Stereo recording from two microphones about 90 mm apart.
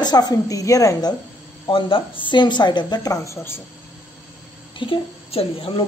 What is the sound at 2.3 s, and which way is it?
A woman's voice, 60° left (ahead or behind).